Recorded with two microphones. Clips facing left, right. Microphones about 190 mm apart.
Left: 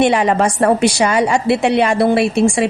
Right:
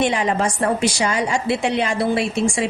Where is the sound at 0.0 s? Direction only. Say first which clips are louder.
Left 6 dB; 65° left (ahead or behind).